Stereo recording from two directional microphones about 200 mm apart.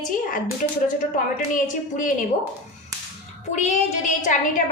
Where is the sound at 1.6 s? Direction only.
40° left (ahead or behind).